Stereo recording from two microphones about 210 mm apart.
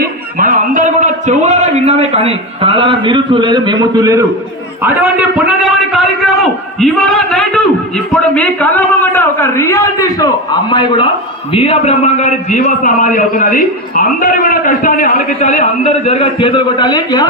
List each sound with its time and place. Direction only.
0.0 s a man's voice: 40° right (ahead or behind); by 17.2 s 20° left (ahead or behind)